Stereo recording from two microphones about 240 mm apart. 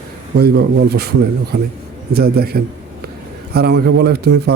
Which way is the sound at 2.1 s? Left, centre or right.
Right.